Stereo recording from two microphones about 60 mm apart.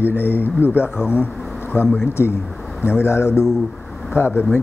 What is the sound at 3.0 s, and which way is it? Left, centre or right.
Speech, left.